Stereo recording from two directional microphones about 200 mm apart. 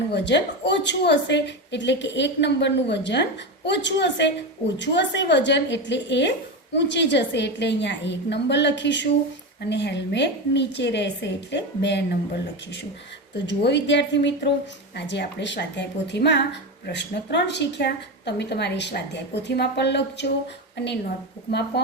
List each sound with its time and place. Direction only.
0.1 s a woman's voice: 60° left (ahead or behind)
13.3 s a woman's voice: 60° left (ahead or behind)